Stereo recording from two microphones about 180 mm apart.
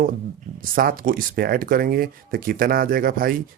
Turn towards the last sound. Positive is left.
turn(degrees=-55)  # may be behind; listen again after turning